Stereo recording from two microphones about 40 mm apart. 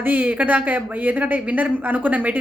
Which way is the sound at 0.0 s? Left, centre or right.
Right.